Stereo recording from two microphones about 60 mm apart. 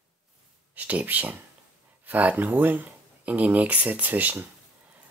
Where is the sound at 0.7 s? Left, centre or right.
Right.